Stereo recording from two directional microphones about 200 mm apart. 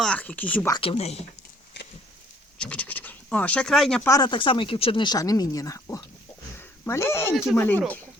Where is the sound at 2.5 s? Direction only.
5° left (ahead or behind).